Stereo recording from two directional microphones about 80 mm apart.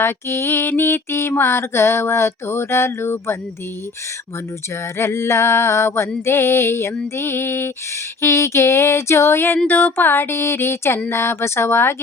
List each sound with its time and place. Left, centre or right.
0.0 s mantra: left
4.9 s mantra: left
7.2 s a sound: left
8.2 s mantra: left
9.6 s a sound: left
11.1 s mantra: left